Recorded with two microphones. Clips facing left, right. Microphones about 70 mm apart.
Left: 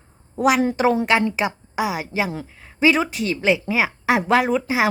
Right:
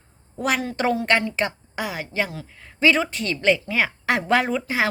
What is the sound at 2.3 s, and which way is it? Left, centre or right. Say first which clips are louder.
Speech: left 6 dB; left.